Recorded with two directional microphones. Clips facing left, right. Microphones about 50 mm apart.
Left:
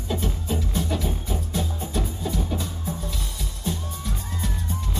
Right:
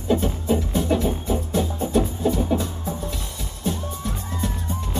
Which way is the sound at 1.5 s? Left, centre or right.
Centre.